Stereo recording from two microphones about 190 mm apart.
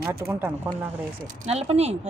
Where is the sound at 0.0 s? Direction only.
10° right (ahead or behind).